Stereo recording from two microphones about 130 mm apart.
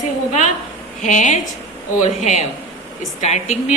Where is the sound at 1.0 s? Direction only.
65° left (ahead or behind).